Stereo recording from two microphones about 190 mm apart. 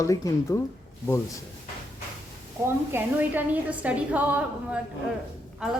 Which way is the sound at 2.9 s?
10° right (ahead or behind).